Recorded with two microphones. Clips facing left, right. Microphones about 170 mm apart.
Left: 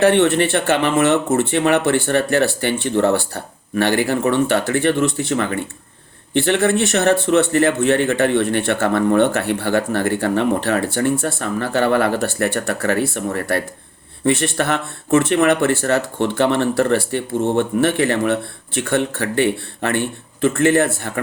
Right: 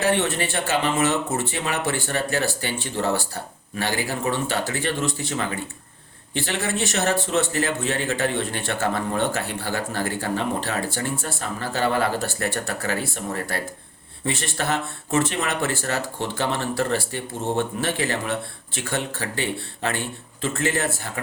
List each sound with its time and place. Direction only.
0.0 s speech: 60° left (ahead or behind)